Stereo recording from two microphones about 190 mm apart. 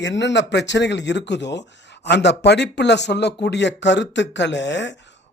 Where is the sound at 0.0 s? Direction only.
70° left (ahead or behind).